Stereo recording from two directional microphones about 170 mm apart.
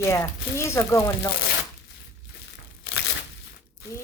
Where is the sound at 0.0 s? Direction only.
15° left (ahead or behind).